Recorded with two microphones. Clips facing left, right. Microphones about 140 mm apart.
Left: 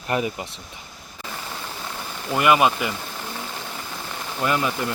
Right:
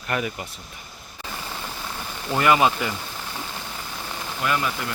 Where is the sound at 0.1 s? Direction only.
30° left (ahead or behind).